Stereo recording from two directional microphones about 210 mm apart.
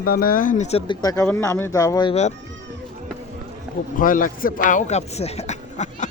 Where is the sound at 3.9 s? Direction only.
40° left (ahead or behind).